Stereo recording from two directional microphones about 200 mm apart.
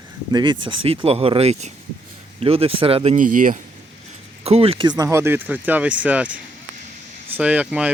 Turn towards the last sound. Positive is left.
turn(degrees=-5)  # may be behind; listen again after turning